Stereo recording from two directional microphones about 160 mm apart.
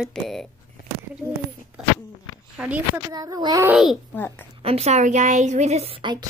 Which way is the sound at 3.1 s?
25° right (ahead or behind).